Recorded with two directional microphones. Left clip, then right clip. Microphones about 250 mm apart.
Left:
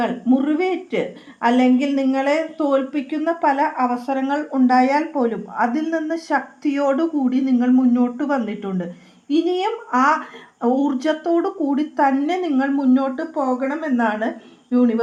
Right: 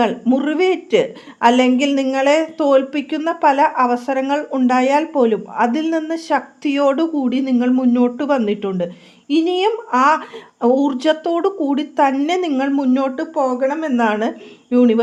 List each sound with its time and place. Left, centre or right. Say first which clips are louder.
0.0 s a woman's voice: right 3 dB; right